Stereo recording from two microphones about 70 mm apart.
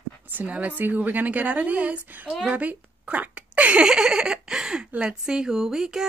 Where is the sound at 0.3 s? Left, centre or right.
Right.